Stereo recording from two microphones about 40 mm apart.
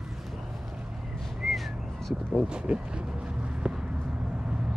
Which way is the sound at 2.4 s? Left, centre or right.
Right.